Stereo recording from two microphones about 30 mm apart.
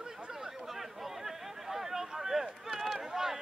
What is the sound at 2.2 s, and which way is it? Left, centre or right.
Run, centre.